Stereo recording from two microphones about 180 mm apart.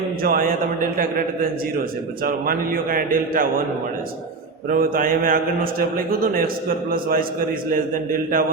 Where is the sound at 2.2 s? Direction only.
50° right (ahead or behind).